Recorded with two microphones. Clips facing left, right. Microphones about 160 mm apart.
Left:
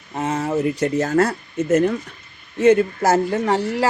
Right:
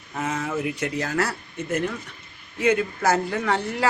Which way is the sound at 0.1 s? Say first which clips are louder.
Left 5 dB; 35° left (ahead or behind).